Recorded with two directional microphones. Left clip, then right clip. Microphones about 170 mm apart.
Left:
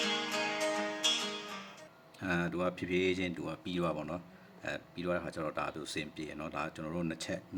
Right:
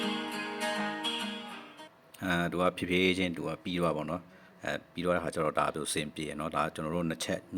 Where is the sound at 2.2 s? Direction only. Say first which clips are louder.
Right 4 dB; 25° right (ahead or behind).